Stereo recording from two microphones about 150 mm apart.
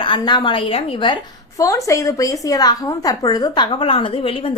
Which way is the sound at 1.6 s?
20° left (ahead or behind).